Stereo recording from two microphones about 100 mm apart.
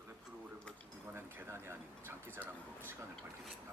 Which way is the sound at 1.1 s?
20° right (ahead or behind).